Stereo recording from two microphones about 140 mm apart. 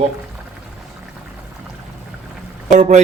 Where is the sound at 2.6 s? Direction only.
60° right (ahead or behind).